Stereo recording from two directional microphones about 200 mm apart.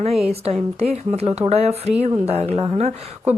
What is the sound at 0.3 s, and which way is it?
Speech, 30° right (ahead or behind).